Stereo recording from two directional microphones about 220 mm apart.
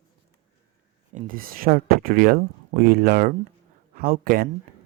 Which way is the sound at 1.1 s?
40° right (ahead or behind).